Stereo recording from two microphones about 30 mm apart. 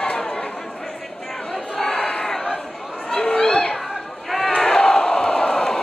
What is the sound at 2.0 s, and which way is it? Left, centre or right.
Battle cry, left.